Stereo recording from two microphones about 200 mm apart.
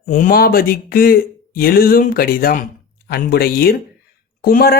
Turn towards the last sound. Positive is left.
turn(degrees=50)  # may be behind; listen again after turning